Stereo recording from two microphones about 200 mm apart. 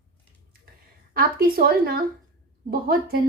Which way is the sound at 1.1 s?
45° right (ahead or behind).